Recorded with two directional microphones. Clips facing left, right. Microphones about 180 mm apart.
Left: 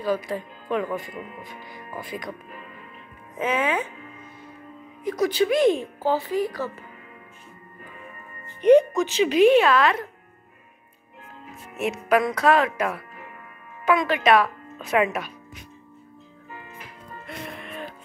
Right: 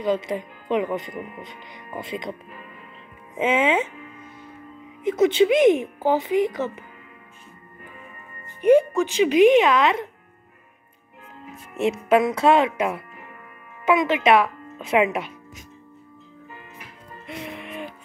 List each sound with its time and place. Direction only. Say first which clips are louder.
0.0 s speech: right 2 dB; 20° right (ahead or behind)
3.3 s speech: right 4 dB; 25° right (ahead or behind)
5.0 s speech: right 5 dB; 25° right (ahead or behind)
8.5 s speech: left 1 dB; 10° right (ahead or behind)
12.1 s speech: right 2 dB; 25° right (ahead or behind)
17.3 s music: right 3 dB; 15° right (ahead or behind)